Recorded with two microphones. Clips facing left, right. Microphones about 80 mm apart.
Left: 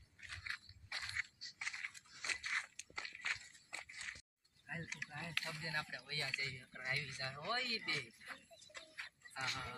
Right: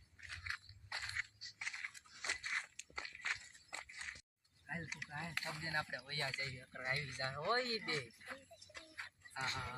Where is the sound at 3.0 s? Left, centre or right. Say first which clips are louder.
Right 1 dB; centre.